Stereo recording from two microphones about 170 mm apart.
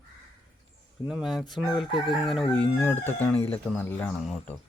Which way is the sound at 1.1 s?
Centre (ahead or behind).